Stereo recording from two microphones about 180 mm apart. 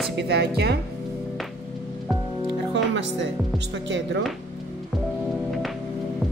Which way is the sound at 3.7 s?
85° right.